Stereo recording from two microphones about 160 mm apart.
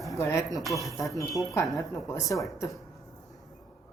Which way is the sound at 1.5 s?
20° left (ahead or behind).